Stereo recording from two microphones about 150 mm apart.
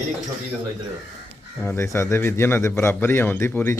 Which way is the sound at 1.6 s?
15° left (ahead or behind).